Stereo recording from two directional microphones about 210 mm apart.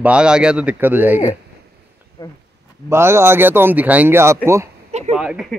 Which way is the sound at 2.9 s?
10° right (ahead or behind).